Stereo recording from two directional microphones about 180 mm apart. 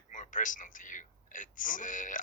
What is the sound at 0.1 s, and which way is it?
A man's voice, 45° left (ahead or behind).